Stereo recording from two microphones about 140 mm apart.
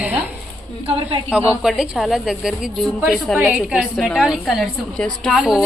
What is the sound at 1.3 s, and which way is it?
A woman's voice, 10° right (ahead or behind).